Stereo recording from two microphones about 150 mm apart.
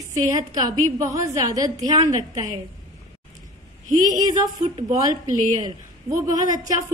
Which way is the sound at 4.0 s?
25° right (ahead or behind).